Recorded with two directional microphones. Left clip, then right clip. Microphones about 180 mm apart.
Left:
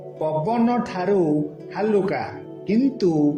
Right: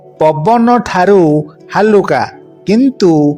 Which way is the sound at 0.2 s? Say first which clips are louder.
Right 13 dB; 45° right (ahead or behind).